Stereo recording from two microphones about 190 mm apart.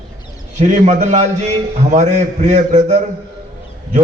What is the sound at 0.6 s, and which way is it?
A man's voice, 40° right (ahead or behind).